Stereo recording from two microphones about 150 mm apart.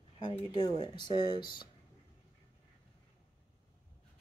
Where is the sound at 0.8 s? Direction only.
30° left (ahead or behind).